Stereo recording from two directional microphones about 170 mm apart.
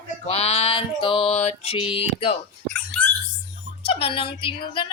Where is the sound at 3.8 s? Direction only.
35° left (ahead or behind).